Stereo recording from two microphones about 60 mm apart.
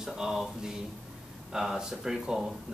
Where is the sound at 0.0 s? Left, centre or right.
Centre.